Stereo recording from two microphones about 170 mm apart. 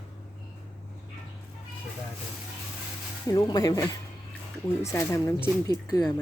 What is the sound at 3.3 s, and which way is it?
Speech, 25° left (ahead or behind).